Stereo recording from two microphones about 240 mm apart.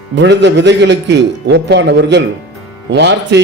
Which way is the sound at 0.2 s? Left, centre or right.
Right.